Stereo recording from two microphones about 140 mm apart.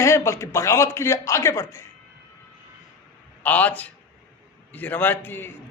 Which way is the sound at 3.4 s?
10° left (ahead or behind).